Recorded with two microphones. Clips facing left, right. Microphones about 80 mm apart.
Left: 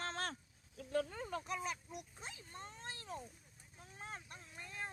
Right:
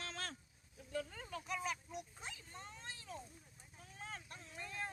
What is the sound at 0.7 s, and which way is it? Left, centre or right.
Cat, left.